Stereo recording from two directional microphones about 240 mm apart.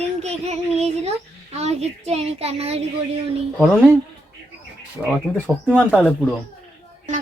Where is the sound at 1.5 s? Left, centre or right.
Right.